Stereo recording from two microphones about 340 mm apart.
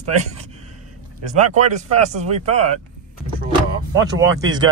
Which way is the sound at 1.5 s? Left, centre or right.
Centre.